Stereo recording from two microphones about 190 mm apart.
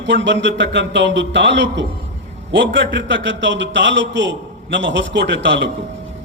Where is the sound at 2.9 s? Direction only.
75° right (ahead or behind).